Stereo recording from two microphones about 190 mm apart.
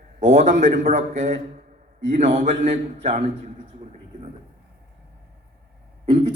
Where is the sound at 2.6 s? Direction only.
35° right (ahead or behind).